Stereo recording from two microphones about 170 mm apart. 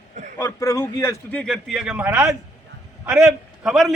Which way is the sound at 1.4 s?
Centre (ahead or behind).